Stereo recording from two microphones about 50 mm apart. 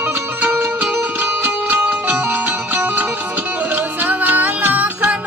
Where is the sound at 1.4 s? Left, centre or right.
Right.